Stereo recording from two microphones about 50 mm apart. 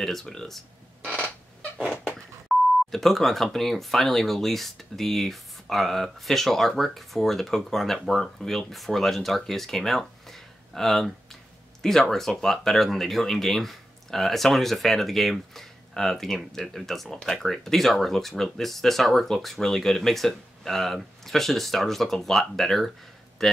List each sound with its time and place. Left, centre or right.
0.0 s speech: centre
2.4 s speech: centre